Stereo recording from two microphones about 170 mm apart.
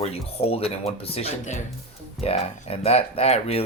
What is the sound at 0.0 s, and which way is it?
Speech, 35° left (ahead or behind).